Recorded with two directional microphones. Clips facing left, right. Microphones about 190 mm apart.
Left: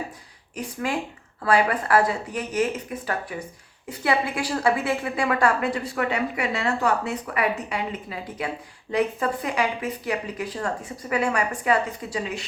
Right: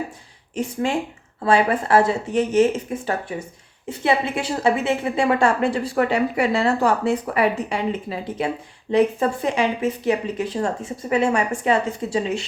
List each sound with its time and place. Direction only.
0.5 s a woman's voice: 25° right (ahead or behind)